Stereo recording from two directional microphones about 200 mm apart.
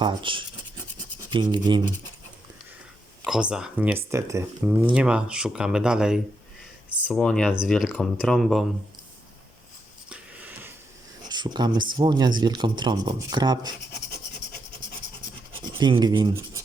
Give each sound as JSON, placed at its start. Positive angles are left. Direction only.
{"t": 0.0, "sound": "speech", "side_deg": -25}
{"t": 3.2, "sound": "speech", "side_deg": -5}
{"t": 10.1, "sound": "a sound", "side_deg": -5}
{"t": 11.3, "sound": "speech", "side_deg": -20}
{"t": 15.8, "sound": "speech", "side_deg": -20}